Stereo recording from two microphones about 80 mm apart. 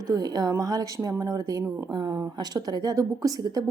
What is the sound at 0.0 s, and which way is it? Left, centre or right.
A woman's voice, right.